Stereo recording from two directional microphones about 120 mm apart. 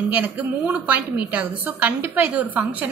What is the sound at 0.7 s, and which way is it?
A woman's voice, 15° right (ahead or behind).